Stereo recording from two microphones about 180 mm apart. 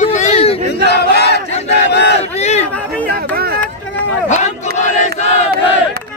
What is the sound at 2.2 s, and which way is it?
Crowd, 35° left (ahead or behind).